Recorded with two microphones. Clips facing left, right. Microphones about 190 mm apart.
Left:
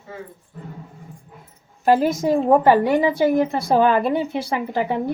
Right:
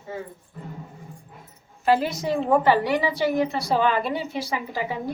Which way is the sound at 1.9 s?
45° left (ahead or behind).